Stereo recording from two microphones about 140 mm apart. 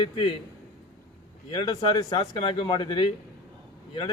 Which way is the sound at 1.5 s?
35° left (ahead or behind).